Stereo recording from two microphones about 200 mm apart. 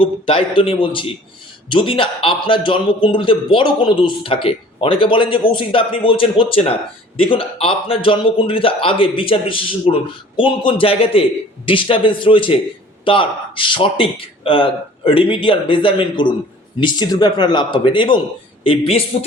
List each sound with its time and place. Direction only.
0.0 s a man's voice: 25° left (ahead or behind)